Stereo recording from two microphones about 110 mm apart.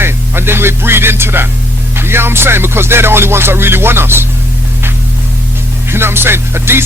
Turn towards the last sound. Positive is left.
turn(degrees=-20)  # may be behind; listen again after turning